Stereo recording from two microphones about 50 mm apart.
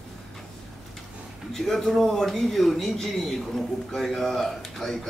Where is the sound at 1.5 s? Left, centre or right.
Centre.